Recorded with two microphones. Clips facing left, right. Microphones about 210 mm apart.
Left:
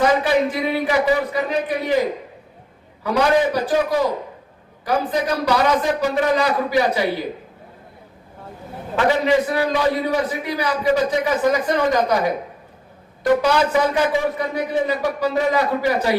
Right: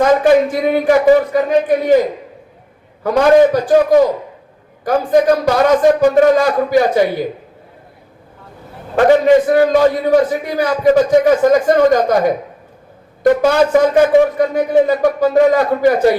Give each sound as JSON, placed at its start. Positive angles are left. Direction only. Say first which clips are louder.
{"t": 0.0, "sound": "a man's voice", "louder": "right 7 dB", "side_deg": -45}
{"t": 3.0, "sound": "a man's voice", "louder": "right 8 dB", "side_deg": -45}
{"t": 9.0, "sound": "a man's voice", "louder": "right 8 dB", "side_deg": -50}
{"t": 13.4, "sound": "a man's voice", "louder": "right 7 dB", "side_deg": -45}